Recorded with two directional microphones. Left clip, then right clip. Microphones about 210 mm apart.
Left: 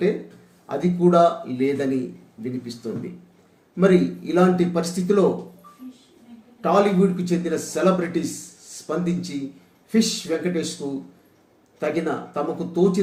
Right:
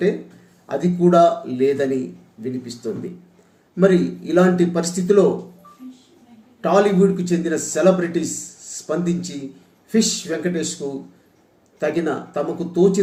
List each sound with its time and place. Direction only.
0.7 s speech: 20° right (ahead or behind)
6.6 s speech: 20° right (ahead or behind)
11.8 s speech: 20° right (ahead or behind)